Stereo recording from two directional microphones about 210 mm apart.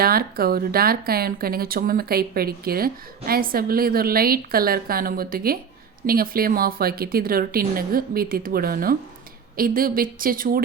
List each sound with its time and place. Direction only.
0.0 s speech: 45° right (ahead or behind)